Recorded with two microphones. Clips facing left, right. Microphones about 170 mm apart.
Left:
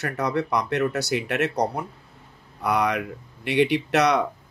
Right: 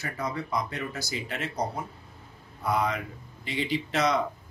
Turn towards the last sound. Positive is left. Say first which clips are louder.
# left 5 dB
turn(degrees=70)  # may be behind; listen again after turning